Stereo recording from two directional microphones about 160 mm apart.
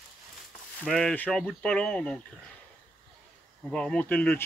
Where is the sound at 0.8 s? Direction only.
5° left (ahead or behind).